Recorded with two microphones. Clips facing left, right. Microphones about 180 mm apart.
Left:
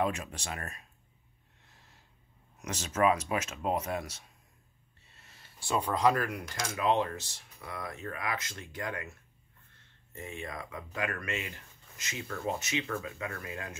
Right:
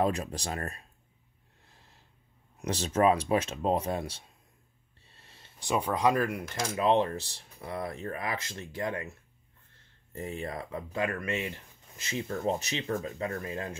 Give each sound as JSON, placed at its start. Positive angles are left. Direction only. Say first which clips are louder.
{"t": 0.0, "sound": "speech", "louder": "right 3 dB", "side_deg": -35}
{"t": 2.6, "sound": "speech", "louder": "right 3 dB", "side_deg": -30}
{"t": 10.1, "sound": "speech", "louder": "right 5 dB", "side_deg": -35}
{"t": 12.5, "sound": "speech", "louder": "right 2 dB", "side_deg": -35}